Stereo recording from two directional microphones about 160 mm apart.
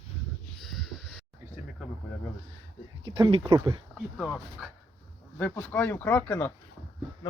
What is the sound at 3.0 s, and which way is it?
Speech, 30° right (ahead or behind).